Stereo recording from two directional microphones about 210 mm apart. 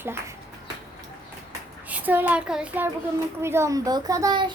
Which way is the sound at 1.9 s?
10° right (ahead or behind).